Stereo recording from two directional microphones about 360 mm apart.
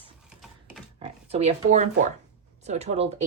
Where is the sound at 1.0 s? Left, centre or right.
Centre.